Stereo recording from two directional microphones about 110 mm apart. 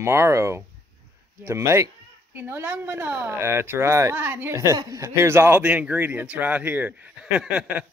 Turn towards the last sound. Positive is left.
turn(degrees=-10)  # may be behind; listen again after turning